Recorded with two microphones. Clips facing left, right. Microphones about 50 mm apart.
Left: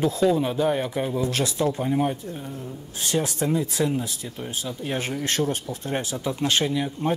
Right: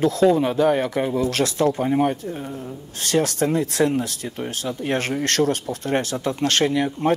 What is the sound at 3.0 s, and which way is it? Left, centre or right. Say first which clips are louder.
Speech: right 4 dB; right.